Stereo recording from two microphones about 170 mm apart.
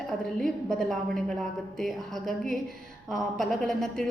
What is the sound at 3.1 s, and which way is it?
Speech, centre (ahead or behind).